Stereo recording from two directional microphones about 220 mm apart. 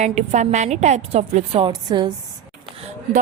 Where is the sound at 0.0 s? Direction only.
30° right (ahead or behind).